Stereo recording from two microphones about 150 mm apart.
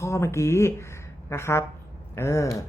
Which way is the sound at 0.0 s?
20° left (ahead or behind).